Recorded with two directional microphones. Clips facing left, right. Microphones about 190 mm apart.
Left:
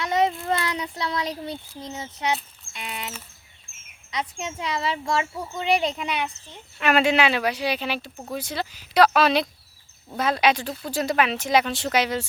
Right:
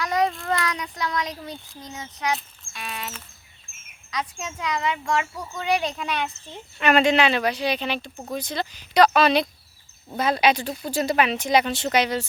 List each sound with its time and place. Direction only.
0.0 s a sound: 25° left (ahead or behind)
0.4 s speech: 30° left (ahead or behind)
4.1 s a child's voice: 25° left (ahead or behind)
6.7 s speech: 5° left (ahead or behind)